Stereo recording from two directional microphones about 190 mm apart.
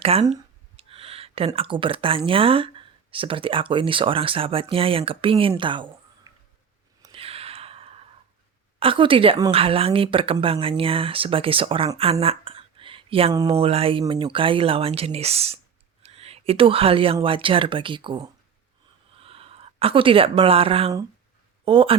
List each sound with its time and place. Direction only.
0.0 s speech: 30° right (ahead or behind)
7.0 s gasp: 30° right (ahead or behind)
8.8 s a woman's voice: 30° right (ahead or behind)